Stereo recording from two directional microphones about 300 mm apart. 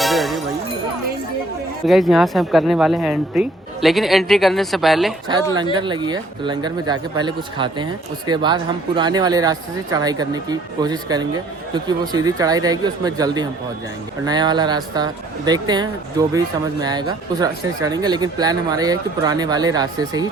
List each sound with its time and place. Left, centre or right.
0.0 s music: centre
1.9 s speech: centre
5.7 s speech: centre